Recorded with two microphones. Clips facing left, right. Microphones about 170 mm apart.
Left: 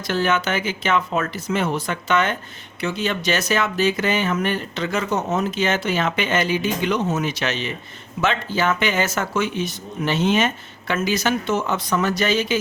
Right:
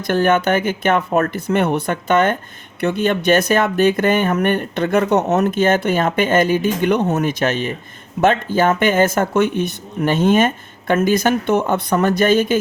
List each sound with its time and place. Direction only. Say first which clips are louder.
0.1 s speech: right 6 dB; 55° right (ahead or behind)